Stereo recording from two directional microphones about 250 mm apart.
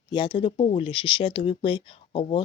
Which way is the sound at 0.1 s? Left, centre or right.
Centre.